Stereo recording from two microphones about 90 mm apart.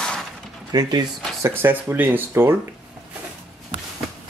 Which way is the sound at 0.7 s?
45° right (ahead or behind).